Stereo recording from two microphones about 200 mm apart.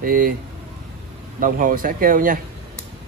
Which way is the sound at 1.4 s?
45° right (ahead or behind).